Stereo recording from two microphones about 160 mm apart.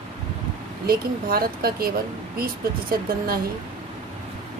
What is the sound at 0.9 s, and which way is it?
Speech, 65° right (ahead or behind).